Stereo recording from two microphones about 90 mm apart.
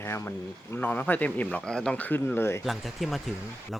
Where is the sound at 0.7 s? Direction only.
20° left (ahead or behind).